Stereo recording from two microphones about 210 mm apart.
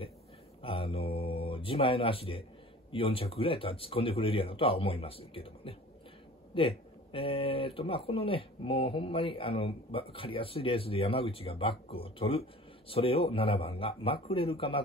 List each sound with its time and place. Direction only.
0.6 s speech: 25° left (ahead or behind)